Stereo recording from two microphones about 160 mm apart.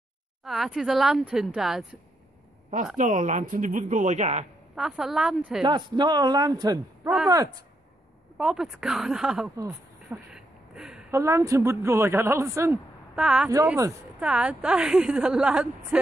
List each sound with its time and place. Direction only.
0.4 s a woman's voice: centre (ahead or behind)
3.0 s speech: 50° right (ahead or behind)
4.7 s a woman's voice: 5° right (ahead or behind)
5.6 s speech: 30° right (ahead or behind)
8.4 s a woman's voice: 5° right (ahead or behind)
9.6 s a sound: 20° right (ahead or behind)
10.3 s a sound: 5° right (ahead or behind)
11.1 s a woman's voice: 20° right (ahead or behind)
13.1 s a woman's voice: 5° right (ahead or behind)